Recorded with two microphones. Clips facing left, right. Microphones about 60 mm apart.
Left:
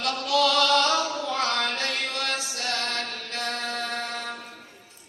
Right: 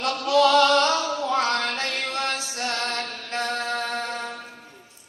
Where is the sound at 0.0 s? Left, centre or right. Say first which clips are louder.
Right 4 dB; right.